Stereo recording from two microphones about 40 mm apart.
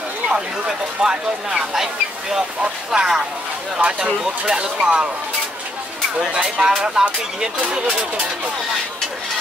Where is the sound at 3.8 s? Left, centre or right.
Right.